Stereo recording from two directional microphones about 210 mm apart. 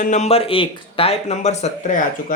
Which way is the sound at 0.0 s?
35° left (ahead or behind).